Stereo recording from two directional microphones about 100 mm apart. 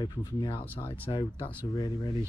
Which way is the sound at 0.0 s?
40° left (ahead or behind).